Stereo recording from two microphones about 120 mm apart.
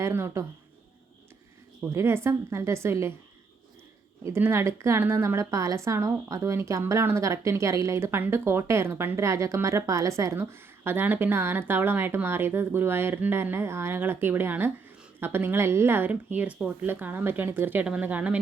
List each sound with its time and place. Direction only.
0.0 s a woman's voice: 20° right (ahead or behind)
1.9 s a woman's voice: 20° right (ahead or behind)
4.2 s a woman's voice: 20° right (ahead or behind)